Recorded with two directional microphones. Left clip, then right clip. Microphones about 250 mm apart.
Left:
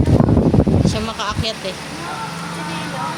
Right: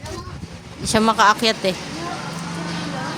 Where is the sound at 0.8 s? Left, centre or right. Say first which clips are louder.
Right 7 dB; right.